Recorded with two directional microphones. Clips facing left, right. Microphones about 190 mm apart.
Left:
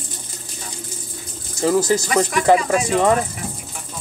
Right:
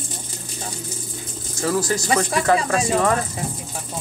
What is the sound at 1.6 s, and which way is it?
Speech, 20° left (ahead or behind).